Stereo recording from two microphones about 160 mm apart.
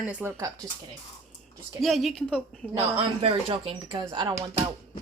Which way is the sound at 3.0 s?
35° right (ahead or behind).